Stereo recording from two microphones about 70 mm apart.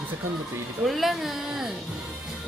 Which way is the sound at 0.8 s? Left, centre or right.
Centre.